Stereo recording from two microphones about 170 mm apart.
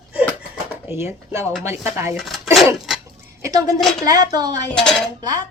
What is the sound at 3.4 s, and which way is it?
A woman's voice, 20° right (ahead or behind).